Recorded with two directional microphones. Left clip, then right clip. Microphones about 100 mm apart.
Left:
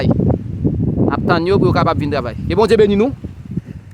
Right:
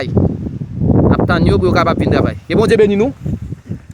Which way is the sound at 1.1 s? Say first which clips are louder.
Right 1 dB; centre (ahead or behind).